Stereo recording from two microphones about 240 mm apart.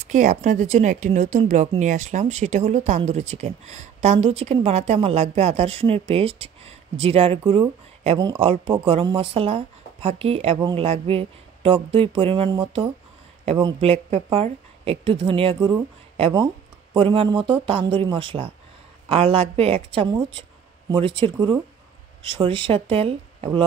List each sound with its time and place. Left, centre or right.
0.0 s a woman's voice: right